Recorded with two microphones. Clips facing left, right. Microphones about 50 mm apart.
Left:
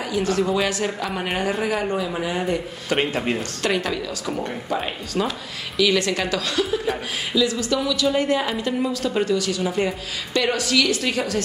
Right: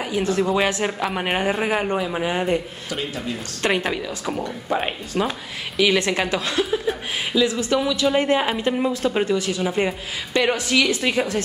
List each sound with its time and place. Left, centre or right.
0.0 s a man's voice: right
2.9 s speech: left
3.6 s speech: right